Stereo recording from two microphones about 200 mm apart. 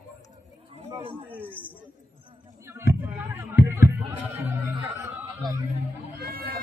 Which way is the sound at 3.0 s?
10° right (ahead or behind).